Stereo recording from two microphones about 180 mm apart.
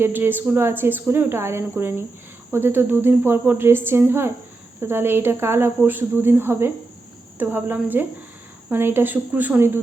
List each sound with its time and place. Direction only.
0.0 s speech: 10° right (ahead or behind)